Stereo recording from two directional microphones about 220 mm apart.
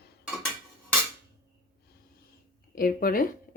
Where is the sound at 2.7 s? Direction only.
40° left (ahead or behind).